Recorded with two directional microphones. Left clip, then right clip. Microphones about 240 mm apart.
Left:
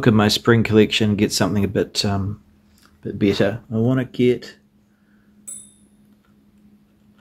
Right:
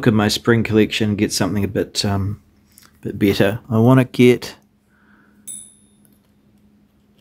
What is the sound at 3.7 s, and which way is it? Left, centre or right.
Speech, right.